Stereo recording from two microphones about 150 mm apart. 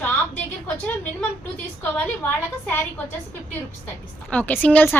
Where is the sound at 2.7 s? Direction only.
15° left (ahead or behind).